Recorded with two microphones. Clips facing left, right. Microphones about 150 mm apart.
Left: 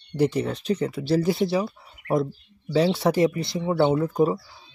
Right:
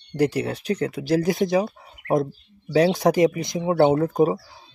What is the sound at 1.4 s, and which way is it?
Speech, 50° right (ahead or behind).